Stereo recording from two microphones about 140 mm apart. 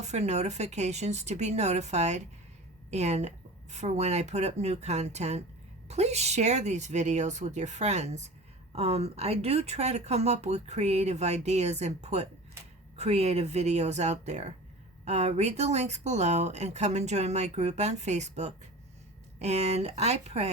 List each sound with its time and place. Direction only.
0.0 s speech: 55° right (ahead or behind)